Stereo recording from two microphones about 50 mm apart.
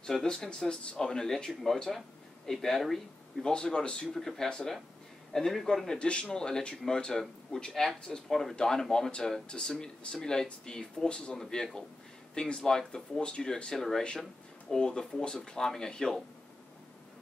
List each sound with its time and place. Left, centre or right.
0.2 s speech: centre
3.4 s speech: centre
4.1 s speech: centre
5.9 s a man's voice: left